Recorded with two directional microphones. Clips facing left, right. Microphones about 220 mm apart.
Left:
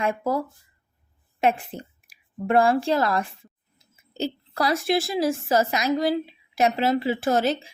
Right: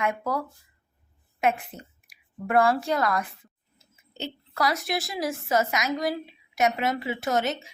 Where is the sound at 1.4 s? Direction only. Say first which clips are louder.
Left 3 dB; 30° left (ahead or behind).